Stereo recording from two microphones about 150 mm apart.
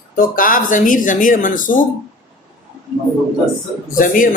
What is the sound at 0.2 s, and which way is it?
Speech, 65° left (ahead or behind).